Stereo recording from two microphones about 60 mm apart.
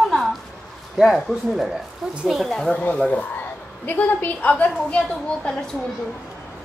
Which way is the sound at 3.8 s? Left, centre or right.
Left.